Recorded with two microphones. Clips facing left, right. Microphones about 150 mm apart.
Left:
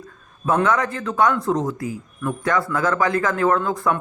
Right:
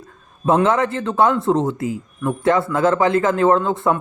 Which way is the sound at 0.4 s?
25° right (ahead or behind).